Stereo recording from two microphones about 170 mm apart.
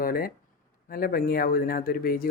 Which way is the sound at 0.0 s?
60° left (ahead or behind).